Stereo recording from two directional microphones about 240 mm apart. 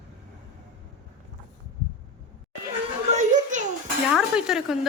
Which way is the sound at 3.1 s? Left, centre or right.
Right.